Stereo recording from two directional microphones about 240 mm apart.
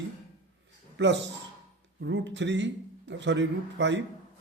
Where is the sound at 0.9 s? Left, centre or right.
Right.